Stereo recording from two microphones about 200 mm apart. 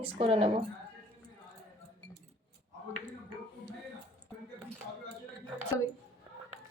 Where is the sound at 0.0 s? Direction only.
30° right (ahead or behind).